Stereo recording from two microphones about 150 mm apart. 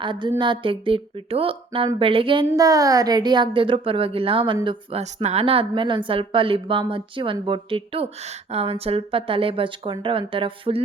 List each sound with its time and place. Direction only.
0.0 s speech: 30° right (ahead or behind)
2.6 s speech: 25° right (ahead or behind)